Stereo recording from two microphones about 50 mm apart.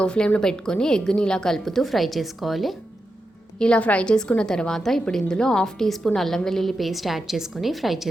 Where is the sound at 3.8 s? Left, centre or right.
Left.